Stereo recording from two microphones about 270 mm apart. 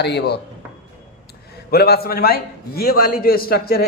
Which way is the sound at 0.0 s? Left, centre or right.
Left.